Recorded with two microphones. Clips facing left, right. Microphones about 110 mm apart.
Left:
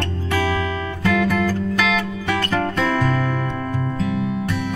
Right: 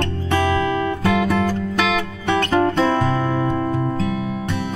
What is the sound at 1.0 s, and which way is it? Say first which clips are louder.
Music: left 1 dB; 25° right (ahead or behind).